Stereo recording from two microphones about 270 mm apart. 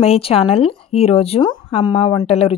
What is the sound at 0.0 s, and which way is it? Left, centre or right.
A woman's voice, left.